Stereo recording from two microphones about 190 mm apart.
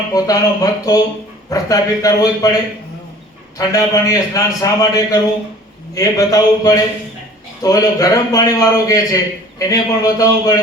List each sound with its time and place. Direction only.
0.1 s a man's voice: 20° left (ahead or behind)
3.6 s a man's voice: 20° left (ahead or behind)